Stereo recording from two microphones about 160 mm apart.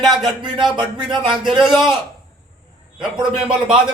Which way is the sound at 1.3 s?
5° right (ahead or behind).